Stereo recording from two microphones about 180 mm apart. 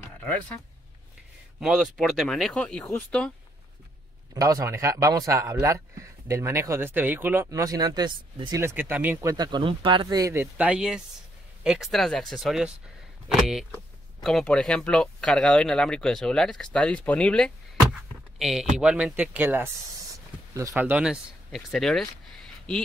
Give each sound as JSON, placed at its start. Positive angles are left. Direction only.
{"t": 0.2, "sound": "speech", "side_deg": 10}
{"t": 1.6, "sound": "speech", "side_deg": 0}
{"t": 4.3, "sound": "speech", "side_deg": -20}